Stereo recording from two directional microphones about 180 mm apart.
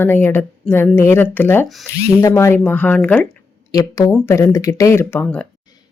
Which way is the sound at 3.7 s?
20° left (ahead or behind).